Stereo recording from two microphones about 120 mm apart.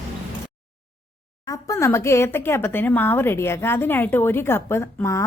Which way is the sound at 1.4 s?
25° left (ahead or behind).